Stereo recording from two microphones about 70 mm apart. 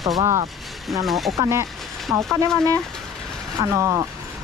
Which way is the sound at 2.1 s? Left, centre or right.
Right.